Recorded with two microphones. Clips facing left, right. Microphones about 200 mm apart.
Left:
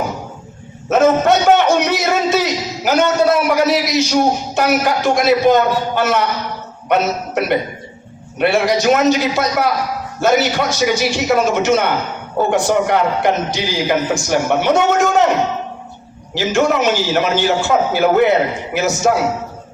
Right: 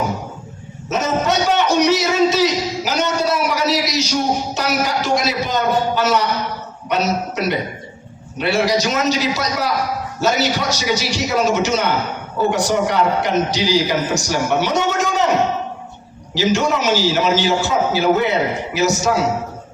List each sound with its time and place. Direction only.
0.9 s a sound: 55° left (ahead or behind)
6.8 s a man's voice: 55° left (ahead or behind)
16.3 s a man's voice: 55° left (ahead or behind)